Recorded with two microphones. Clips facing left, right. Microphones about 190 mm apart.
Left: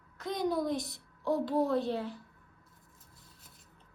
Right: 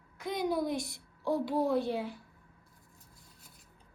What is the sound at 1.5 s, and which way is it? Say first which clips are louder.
Speech: even; centre (ahead or behind).